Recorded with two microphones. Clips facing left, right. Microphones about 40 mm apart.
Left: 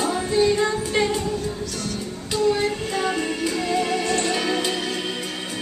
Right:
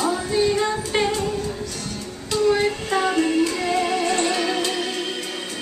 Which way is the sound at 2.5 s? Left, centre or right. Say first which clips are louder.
Right 3 dB; centre.